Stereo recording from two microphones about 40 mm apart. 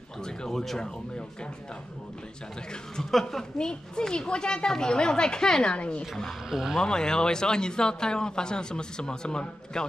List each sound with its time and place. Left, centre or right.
0.2 s speech: centre
3.1 s speech: centre
3.5 s a man's voice: centre
6.5 s speech: centre
6.8 s a man's voice: centre